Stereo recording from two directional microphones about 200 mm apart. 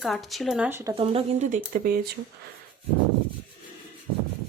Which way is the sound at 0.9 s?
25° right (ahead or behind).